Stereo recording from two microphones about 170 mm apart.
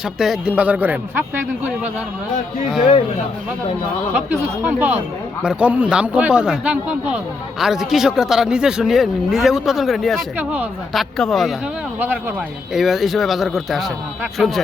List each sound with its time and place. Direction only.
0.2 s a man's voice: 5° right (ahead or behind)
4.1 s a man's voice: 10° right (ahead or behind)
11.9 s a man's voice: 10° right (ahead or behind)